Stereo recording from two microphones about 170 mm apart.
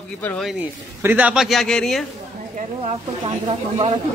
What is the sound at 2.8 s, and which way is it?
Speech, 30° right (ahead or behind).